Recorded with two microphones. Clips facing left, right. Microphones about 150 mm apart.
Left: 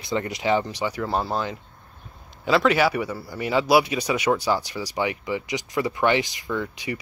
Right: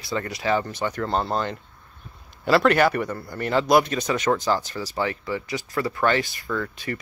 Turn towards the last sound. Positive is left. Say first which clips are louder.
# even
turn(degrees=15)  # may be behind; listen again after turning